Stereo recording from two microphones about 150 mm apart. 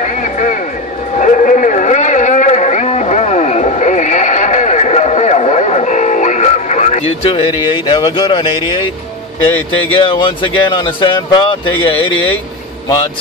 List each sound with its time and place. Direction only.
0.0 s vehicle: 55° left (ahead or behind)
1.2 s a sound: 55° left (ahead or behind); by 7.4 s 40° left (ahead or behind)
7.9 s speech: 35° left (ahead or behind)
9.9 s speech: 35° left (ahead or behind)